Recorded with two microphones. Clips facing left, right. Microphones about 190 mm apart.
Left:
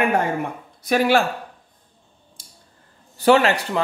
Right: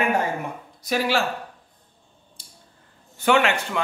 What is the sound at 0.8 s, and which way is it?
Speech, 55° left (ahead or behind).